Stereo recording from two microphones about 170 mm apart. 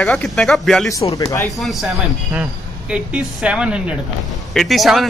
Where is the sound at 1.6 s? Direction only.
Centre (ahead or behind).